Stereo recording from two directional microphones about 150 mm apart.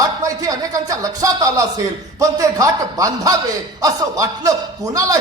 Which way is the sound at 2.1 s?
20° right (ahead or behind).